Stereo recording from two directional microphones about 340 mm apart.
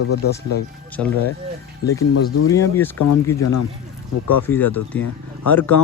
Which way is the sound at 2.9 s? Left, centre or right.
Left.